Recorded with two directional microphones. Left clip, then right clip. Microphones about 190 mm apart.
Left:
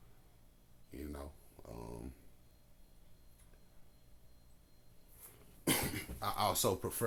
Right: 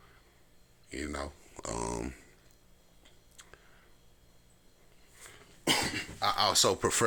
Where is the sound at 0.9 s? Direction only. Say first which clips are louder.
Right 10 dB; 15° right (ahead or behind).